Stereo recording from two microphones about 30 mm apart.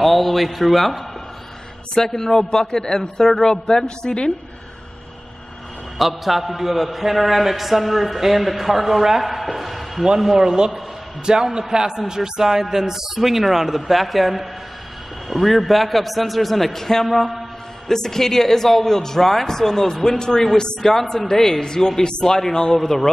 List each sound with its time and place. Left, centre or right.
0.0 s a man's voice: centre
2.0 s speech: centre
5.9 s a man's voice: centre
9.2 s a sound: centre
10.0 s a man's voice: centre
11.5 s a man's voice: right; by 20.4 s left
20.8 s speech: centre
22.8 s a man's voice: centre